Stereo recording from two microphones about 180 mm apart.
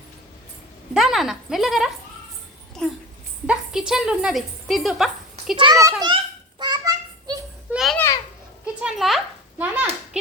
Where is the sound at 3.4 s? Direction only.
5° right (ahead or behind).